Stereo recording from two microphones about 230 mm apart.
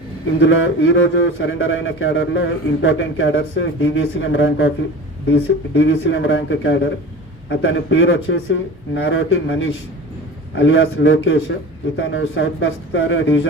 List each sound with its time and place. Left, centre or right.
0.3 s speech: left